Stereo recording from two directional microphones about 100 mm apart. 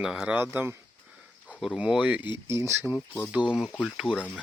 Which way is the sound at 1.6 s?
10° right (ahead or behind).